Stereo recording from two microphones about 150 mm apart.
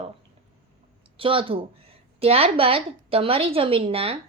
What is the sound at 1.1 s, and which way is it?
A woman's voice, 35° right (ahead or behind).